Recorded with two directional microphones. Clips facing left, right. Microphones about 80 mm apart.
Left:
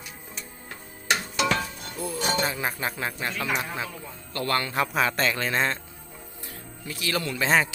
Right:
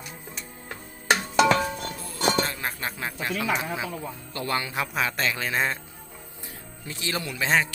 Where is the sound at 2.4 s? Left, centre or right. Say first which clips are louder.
Left 3 dB; centre.